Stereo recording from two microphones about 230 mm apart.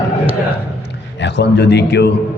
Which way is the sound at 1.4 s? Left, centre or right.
Left.